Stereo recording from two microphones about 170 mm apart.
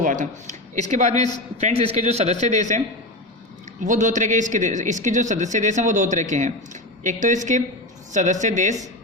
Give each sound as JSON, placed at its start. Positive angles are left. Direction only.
{"t": 0.0, "sound": "speech", "side_deg": -50}
{"t": 3.8, "sound": "speech", "side_deg": -45}